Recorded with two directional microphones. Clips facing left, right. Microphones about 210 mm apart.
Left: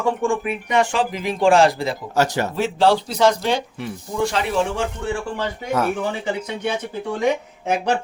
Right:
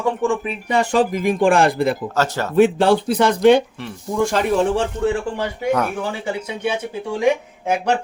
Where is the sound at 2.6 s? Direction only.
55° right (ahead or behind).